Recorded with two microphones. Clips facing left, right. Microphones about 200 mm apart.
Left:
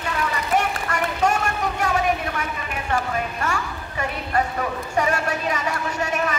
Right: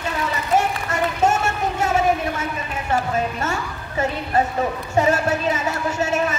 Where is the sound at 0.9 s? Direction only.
25° right (ahead or behind).